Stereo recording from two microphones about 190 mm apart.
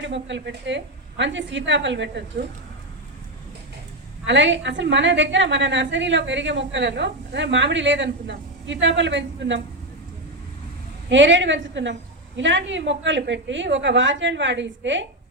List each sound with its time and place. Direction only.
0.0 s a woman's voice: 70° right (ahead or behind)
4.3 s a woman's voice: 75° right (ahead or behind)
11.1 s a woman's voice: 70° right (ahead or behind)